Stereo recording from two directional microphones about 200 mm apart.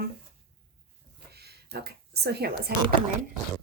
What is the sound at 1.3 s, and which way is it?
Speech, 50° right (ahead or behind).